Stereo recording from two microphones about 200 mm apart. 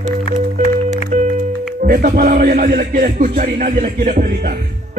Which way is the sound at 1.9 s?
45° right (ahead or behind).